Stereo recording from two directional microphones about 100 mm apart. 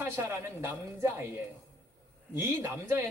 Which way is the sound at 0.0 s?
25° right (ahead or behind).